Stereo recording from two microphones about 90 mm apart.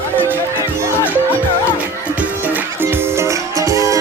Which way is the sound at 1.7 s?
20° right (ahead or behind).